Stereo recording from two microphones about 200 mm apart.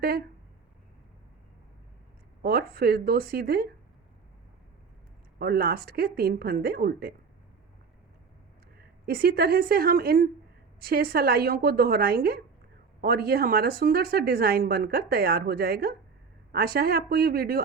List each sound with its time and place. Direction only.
0.0 s a woman's voice: 50° right (ahead or behind)
2.4 s a woman's voice: 50° right (ahead or behind)
5.4 s a woman's voice: 50° right (ahead or behind)
8.8 s a woman's voice: 50° right (ahead or behind)